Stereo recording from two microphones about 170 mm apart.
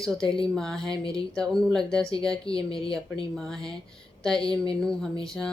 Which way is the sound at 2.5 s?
30° left (ahead or behind).